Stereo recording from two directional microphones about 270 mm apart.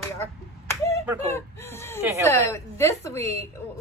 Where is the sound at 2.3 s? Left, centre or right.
Centre.